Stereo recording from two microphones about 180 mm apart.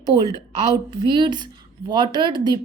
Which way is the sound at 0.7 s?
25° right (ahead or behind).